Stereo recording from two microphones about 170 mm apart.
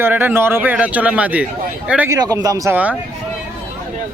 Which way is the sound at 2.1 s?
20° right (ahead or behind).